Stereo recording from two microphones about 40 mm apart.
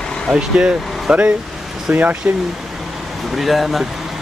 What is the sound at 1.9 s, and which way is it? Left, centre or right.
Speech, right.